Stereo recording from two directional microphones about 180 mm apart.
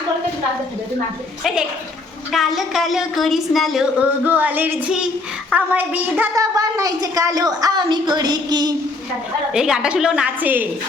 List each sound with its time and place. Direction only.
2.3 s a woman's voice: centre (ahead or behind)
4.3 s female singing: 10° right (ahead or behind)
5.5 s a woman's voice: 10° right (ahead or behind)
9.5 s a woman's voice: 5° right (ahead or behind)